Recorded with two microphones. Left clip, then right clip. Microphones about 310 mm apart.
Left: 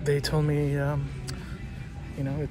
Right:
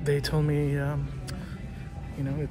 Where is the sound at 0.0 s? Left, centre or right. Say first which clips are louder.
Left 1 dB; centre.